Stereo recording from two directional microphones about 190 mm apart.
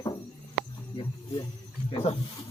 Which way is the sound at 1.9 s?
35° left (ahead or behind).